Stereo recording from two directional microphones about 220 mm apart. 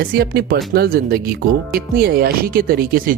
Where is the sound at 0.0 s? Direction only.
45° right (ahead or behind).